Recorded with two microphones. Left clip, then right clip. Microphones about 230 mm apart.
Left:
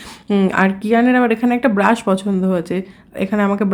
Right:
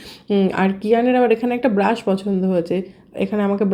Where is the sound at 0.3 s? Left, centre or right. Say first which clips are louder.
Left 3 dB; centre.